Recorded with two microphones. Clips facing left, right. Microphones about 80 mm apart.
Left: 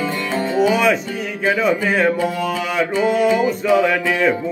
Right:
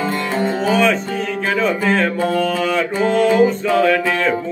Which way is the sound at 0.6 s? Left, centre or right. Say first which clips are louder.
Left 2 dB; centre.